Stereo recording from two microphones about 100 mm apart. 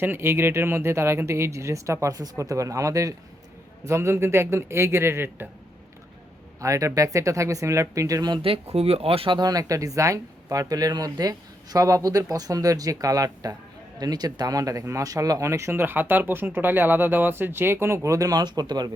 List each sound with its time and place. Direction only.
0.0 s speech: 20° right (ahead or behind)
6.6 s speech: 30° right (ahead or behind)
8.4 s speech: 80° right
9.3 s speech: 40° right (ahead or behind)